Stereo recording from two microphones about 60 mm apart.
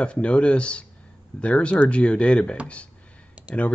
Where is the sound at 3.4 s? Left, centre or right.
Right.